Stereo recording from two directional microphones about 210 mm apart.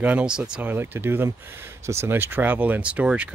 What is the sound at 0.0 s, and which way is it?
Speech, 5° right (ahead or behind).